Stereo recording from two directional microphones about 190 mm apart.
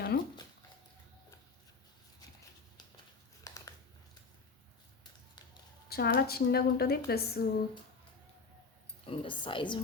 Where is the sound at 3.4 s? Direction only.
15° left (ahead or behind).